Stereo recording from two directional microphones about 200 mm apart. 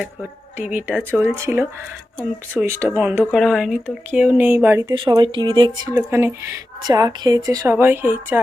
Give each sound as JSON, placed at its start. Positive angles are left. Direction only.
{"t": 0.0, "sound": "speech", "side_deg": -5}
{"t": 5.9, "sound": "speech", "side_deg": -10}